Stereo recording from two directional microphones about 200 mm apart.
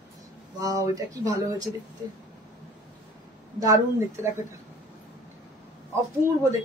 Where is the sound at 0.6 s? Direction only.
15° right (ahead or behind).